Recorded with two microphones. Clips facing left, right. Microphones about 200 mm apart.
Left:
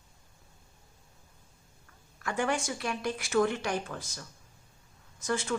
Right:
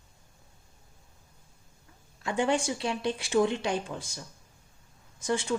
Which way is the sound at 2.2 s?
30° right (ahead or behind).